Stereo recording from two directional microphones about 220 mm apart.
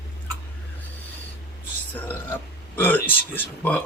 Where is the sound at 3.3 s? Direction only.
5° left (ahead or behind).